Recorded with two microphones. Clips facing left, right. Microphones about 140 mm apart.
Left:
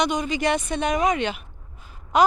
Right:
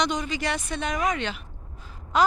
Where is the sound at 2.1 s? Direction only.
15° left (ahead or behind).